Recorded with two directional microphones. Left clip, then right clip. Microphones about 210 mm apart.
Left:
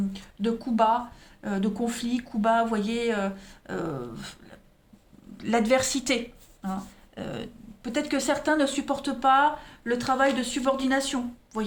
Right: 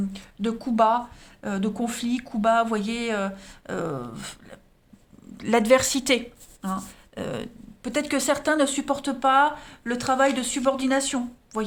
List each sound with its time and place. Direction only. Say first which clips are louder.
0.1 s speech: even; 35° right (ahead or behind)